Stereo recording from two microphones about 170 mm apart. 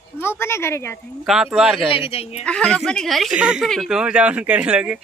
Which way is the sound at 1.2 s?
Centre (ahead or behind).